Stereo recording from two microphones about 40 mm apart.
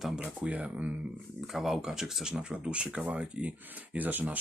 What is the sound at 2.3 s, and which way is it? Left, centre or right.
Speech, right.